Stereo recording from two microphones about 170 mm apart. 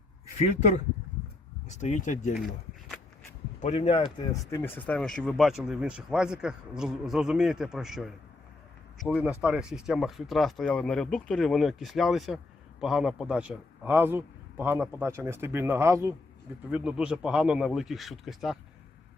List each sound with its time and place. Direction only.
1.6 s speech: 45° left (ahead or behind)
3.6 s speech: 35° left (ahead or behind)
4.3 s a man's voice: 15° left (ahead or behind); by 16.1 s 15° right (ahead or behind)
16.7 s speech: 5° right (ahead or behind)